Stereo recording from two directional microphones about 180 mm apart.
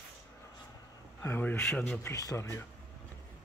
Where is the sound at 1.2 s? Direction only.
10° left (ahead or behind).